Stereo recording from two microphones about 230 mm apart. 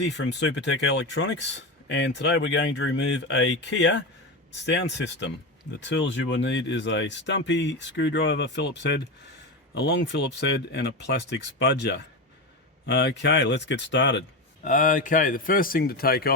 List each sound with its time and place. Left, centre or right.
0.0 s speech: left
14.6 s speech: left